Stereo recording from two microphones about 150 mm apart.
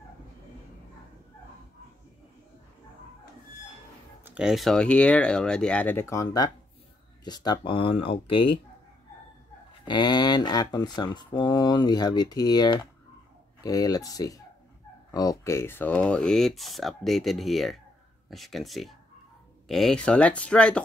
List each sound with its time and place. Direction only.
4.2 s speech: 5° right (ahead or behind); by 8.5 s 35° left (ahead or behind)
9.8 s speech: 30° left (ahead or behind); by 20.8 s 5° left (ahead or behind)